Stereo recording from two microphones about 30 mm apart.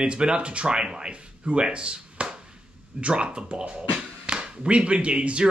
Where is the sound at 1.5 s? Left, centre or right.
Right.